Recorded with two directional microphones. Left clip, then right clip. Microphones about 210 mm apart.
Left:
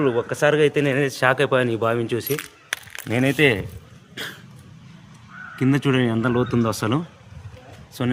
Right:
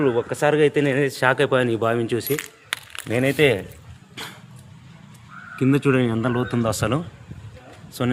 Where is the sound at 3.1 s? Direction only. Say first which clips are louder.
Even; 15° left (ahead or behind).